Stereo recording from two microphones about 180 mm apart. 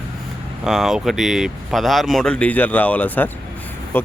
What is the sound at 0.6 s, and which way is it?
Speech, centre (ahead or behind).